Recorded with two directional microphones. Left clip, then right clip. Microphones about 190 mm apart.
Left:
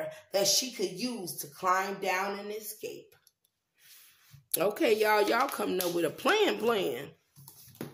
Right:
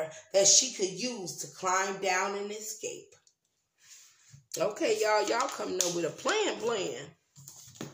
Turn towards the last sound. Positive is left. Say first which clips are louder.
# left 3 dB
turn(degrees=45)  # may be behind; listen again after turning